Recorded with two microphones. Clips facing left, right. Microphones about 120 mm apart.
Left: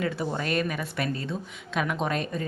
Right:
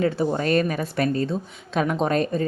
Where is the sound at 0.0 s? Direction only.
35° right (ahead or behind).